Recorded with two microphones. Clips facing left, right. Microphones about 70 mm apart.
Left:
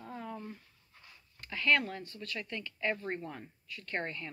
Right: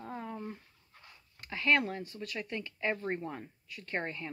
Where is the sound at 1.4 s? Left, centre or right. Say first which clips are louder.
Right 1 dB; centre.